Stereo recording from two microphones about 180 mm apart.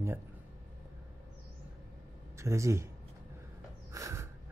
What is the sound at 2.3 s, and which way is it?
Speech, 15° right (ahead or behind).